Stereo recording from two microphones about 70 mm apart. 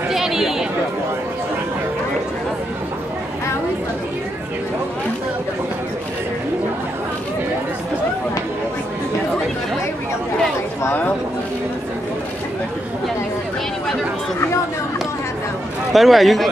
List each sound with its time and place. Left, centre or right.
0.1 s chatter: centre
10.8 s a sound: left
15.9 s a man's voice: centre